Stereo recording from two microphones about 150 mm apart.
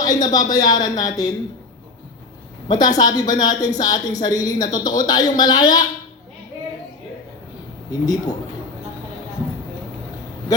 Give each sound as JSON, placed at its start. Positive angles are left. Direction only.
{"t": 0.0, "sound": "a woman's voice", "side_deg": 25}
{"t": 2.6, "sound": "a woman's voice", "side_deg": 25}
{"t": 7.9, "sound": "a woman's voice", "side_deg": 25}